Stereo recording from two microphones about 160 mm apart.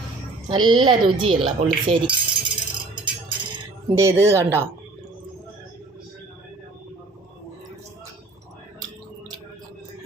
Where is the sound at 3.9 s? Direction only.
20° right (ahead or behind).